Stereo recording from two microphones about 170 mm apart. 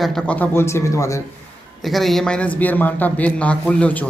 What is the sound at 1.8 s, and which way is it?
Speech, centre (ahead or behind).